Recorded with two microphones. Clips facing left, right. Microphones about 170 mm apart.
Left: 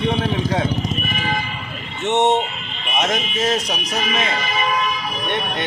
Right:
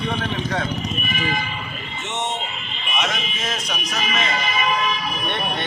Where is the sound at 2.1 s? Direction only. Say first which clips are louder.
Left 11 dB; 65° left (ahead or behind).